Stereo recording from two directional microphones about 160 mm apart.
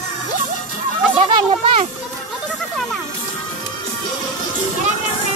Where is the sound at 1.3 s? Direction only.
30° right (ahead or behind).